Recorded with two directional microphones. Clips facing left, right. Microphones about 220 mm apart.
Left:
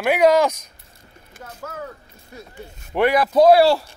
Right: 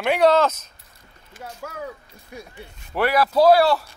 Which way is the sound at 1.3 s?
55° left (ahead or behind).